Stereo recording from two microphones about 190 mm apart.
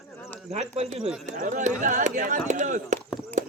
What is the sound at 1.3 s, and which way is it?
Speech, 45° right (ahead or behind).